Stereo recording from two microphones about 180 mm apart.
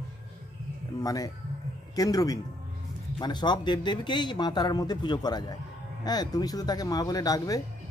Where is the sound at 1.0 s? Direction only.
20° left (ahead or behind).